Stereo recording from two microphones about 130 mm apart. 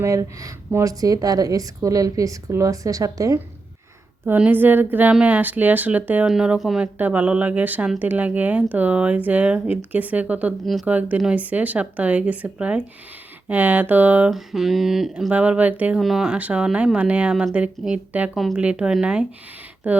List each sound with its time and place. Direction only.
0.0 s a woman's voice: 25° right (ahead or behind)
4.3 s a woman's voice: 15° right (ahead or behind)